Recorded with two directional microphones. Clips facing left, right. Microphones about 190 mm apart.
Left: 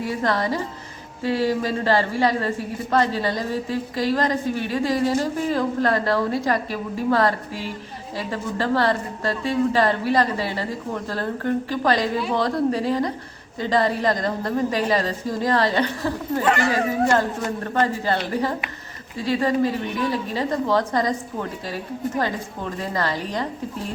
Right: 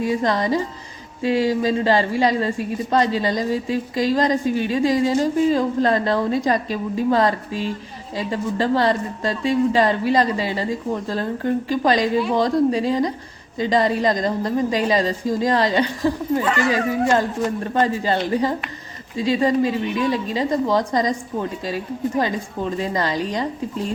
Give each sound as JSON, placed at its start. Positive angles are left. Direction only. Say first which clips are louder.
{"t": 0.1, "sound": "a woman's voice", "louder": "right 1 dB", "side_deg": -15}
{"t": 22.2, "sound": "a woman's voice", "louder": "right 3 dB", "side_deg": -15}